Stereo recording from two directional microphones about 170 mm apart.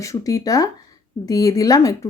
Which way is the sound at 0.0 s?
20° left (ahead or behind).